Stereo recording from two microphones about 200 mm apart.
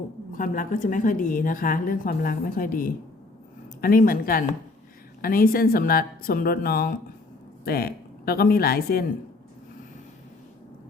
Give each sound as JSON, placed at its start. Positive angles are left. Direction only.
{"t": 0.3, "sound": "a woman's voice", "side_deg": 40}